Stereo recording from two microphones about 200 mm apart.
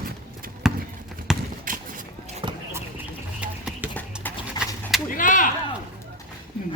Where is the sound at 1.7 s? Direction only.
40° right (ahead or behind).